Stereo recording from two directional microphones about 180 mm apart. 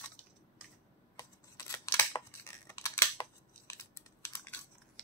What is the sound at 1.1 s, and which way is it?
Scissors, 15° left (ahead or behind).